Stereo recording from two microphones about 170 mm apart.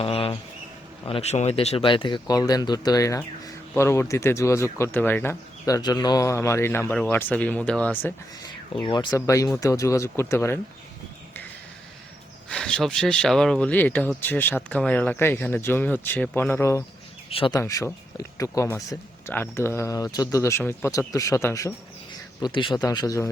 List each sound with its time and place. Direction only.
0.0 s a sound: 35° left (ahead or behind)
1.0 s speech: 35° left (ahead or behind); by 8.1 s 5° left (ahead or behind)
8.7 s speech: 25° left (ahead or behind)
12.5 s speech: 5° left (ahead or behind)
17.2 s speech: 30° left (ahead or behind)
17.6 s speech: 15° left (ahead or behind)